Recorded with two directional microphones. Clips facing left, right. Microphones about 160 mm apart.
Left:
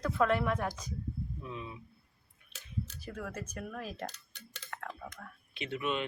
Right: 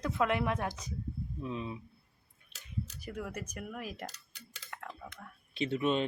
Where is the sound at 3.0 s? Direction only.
15° right (ahead or behind).